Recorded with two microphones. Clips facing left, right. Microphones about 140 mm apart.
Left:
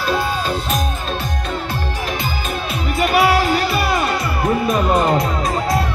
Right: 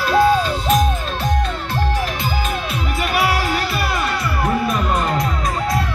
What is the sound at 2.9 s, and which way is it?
Music, 20° left (ahead or behind).